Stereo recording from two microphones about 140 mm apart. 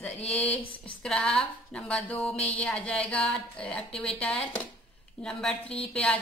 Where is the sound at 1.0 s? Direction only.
5° left (ahead or behind).